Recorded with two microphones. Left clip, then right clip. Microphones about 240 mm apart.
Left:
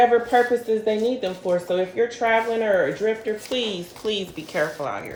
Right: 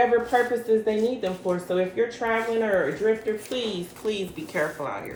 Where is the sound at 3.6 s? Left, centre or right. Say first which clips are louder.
Left 3 dB; left.